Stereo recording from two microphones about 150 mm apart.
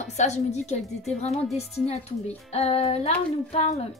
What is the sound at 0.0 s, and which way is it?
A woman's voice, 50° left (ahead or behind).